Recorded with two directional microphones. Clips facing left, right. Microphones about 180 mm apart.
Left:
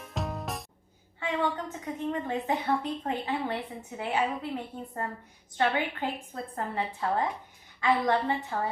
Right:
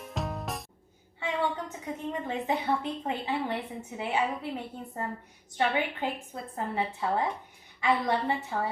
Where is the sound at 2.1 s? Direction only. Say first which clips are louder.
Left 1 dB; 15° right (ahead or behind).